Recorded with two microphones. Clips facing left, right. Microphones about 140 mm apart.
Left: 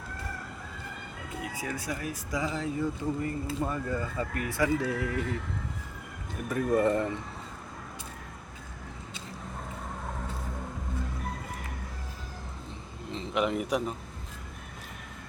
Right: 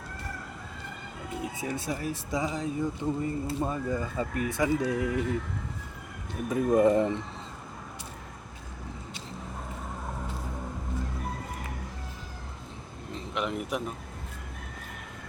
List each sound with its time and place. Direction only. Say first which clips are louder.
1.4 s speech: right 2 dB; 25° right (ahead or behind)
6.5 s speech: right 3 dB; 15° right (ahead or behind)
13.1 s a sound: left 4 dB; centre (ahead or behind)